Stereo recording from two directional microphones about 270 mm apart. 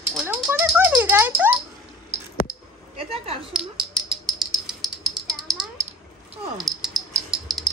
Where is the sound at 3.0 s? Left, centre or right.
Right.